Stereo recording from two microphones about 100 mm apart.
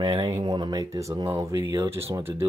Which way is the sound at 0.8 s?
30° right (ahead or behind).